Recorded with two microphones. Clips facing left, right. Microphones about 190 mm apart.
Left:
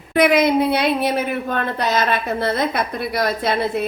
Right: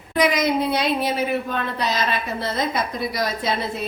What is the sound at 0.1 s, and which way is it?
A woman's voice, 60° left (ahead or behind).